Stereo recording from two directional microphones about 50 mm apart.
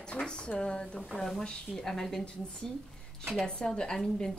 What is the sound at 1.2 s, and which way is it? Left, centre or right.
Speech, centre.